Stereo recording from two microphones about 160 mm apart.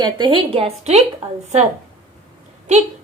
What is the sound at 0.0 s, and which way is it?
A woman's voice, 30° right (ahead or behind).